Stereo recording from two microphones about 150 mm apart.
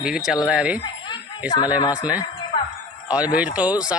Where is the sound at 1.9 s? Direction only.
10° right (ahead or behind).